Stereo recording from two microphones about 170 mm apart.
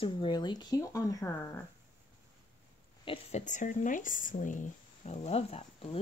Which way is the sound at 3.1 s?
40° left (ahead or behind).